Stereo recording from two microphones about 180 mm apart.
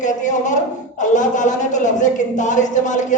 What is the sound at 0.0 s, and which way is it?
A man's voice, 45° left (ahead or behind).